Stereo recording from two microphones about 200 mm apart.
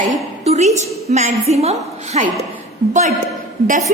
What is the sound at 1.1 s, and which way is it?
A woman's voice, 35° right (ahead or behind).